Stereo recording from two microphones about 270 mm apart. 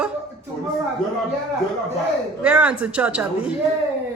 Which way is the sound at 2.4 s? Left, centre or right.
Centre.